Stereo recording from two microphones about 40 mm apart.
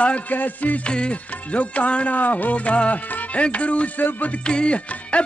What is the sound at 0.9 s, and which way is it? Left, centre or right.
Music, left.